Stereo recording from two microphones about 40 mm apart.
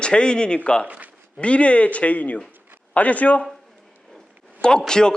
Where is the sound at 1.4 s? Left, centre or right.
Left.